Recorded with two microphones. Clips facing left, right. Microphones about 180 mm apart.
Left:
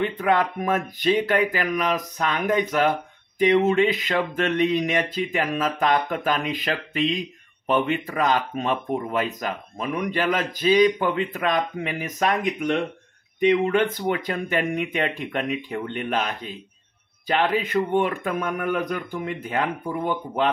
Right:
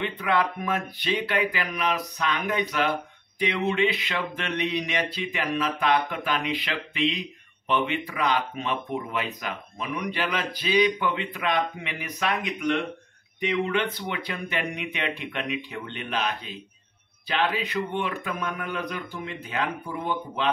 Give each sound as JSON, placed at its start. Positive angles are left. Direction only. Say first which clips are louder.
{"t": 0.0, "sound": "speech", "louder": "left 4 dB", "side_deg": 45}